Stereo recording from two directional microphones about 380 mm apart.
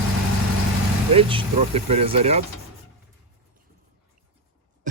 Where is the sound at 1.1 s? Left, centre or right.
Centre.